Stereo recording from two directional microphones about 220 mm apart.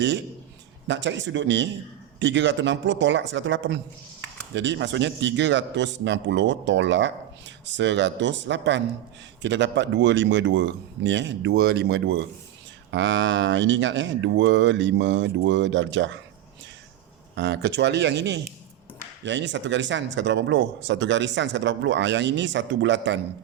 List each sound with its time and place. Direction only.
0.9 s a man's voice: 55° right (ahead or behind)
17.3 s a man's voice: 50° right (ahead or behind)